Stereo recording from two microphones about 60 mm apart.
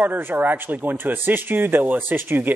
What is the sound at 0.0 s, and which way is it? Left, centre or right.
Speech, right.